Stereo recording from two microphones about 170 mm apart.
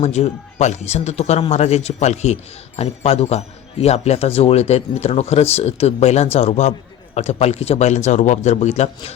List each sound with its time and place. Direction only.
0.0 s a man's voice: 40° left (ahead or behind)